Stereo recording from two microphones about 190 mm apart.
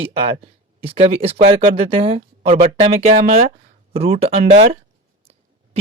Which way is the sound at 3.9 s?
30° right (ahead or behind).